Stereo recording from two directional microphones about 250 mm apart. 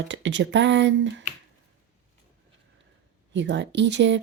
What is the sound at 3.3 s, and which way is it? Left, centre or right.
Speech, right.